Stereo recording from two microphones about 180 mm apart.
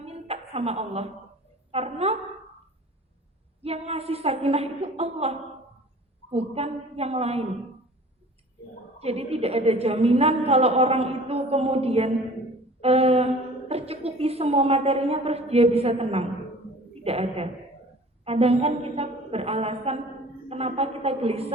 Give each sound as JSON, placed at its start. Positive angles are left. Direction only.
{"t": 0.0, "sound": "music", "side_deg": -35}
{"t": 1.7, "sound": "a woman's voice", "side_deg": -35}
{"t": 3.6, "sound": "a woman's voice", "side_deg": -35}
{"t": 9.0, "sound": "a woman's voice", "side_deg": -35}